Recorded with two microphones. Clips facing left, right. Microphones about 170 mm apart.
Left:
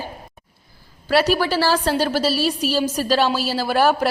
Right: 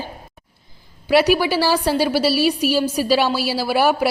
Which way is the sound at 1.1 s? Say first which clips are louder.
Right 2 dB; 15° right (ahead or behind).